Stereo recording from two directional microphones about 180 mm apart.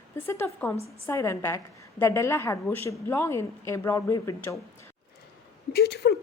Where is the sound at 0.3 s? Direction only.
15° left (ahead or behind).